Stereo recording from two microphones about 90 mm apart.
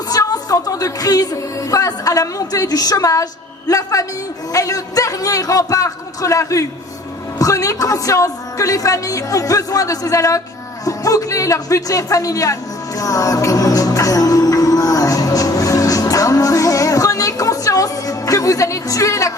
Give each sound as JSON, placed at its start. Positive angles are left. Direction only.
{"t": 0.1, "sound": "a woman's voice", "side_deg": 45}
{"t": 13.0, "sound": "music", "side_deg": 40}